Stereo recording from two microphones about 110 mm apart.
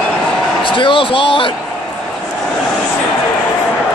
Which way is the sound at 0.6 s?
50° left (ahead or behind).